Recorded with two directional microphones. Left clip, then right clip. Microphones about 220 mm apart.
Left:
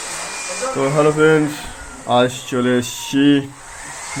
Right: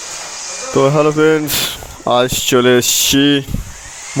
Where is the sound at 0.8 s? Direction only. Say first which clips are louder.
Right 3 dB; 50° right (ahead or behind).